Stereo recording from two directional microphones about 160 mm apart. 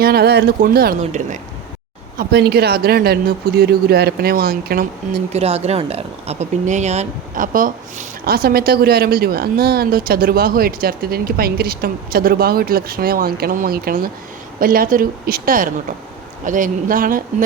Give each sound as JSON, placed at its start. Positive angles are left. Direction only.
{"t": 0.0, "sound": "speech", "side_deg": -80}
{"t": 0.9, "sound": "a woman's voice", "side_deg": -50}
{"t": 2.1, "sound": "speech", "side_deg": -85}
{"t": 5.3, "sound": "speech", "side_deg": -40}